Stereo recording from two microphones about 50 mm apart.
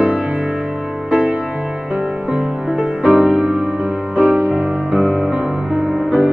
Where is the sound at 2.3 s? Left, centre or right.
Centre.